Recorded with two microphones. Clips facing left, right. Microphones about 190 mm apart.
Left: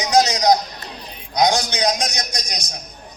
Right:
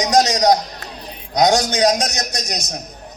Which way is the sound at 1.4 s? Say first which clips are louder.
Right 4 dB; 45° right (ahead or behind).